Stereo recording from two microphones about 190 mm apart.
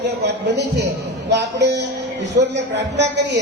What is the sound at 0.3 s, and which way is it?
A man's voice, 65° right (ahead or behind).